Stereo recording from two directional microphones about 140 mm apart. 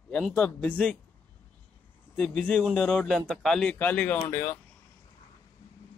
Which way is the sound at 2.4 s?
5° left (ahead or behind).